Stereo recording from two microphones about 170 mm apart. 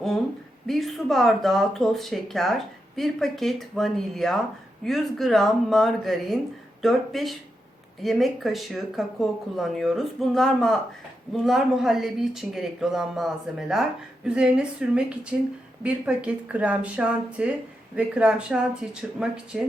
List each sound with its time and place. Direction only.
0.7 s speech: centre (ahead or behind)